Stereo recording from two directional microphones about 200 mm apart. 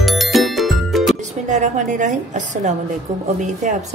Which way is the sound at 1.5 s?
40° right (ahead or behind).